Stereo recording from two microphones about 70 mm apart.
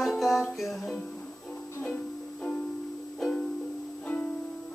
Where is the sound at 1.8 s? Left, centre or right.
Left.